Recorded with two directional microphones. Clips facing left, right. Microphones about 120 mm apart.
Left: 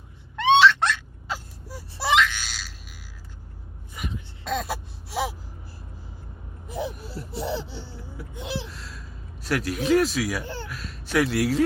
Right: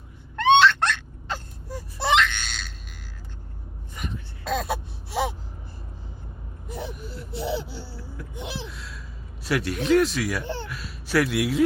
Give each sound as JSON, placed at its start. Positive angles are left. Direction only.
{"t": 0.3, "sound": "laughter", "side_deg": 0}
{"t": 3.9, "sound": "gasp", "side_deg": 0}
{"t": 6.7, "sound": "a sound", "side_deg": 0}
{"t": 7.6, "sound": "a sound", "side_deg": 25}
{"t": 8.4, "sound": "gasp", "side_deg": -20}
{"t": 8.7, "sound": "gasp", "side_deg": 0}
{"t": 9.4, "sound": "a man's voice", "side_deg": 0}
{"t": 10.4, "sound": "speech", "side_deg": -20}
{"t": 10.7, "sound": "a sound", "side_deg": 0}